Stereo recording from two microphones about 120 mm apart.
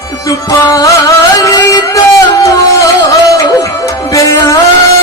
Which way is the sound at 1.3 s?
30° left (ahead or behind).